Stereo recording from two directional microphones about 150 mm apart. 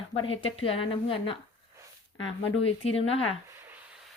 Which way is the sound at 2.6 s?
40° left (ahead or behind).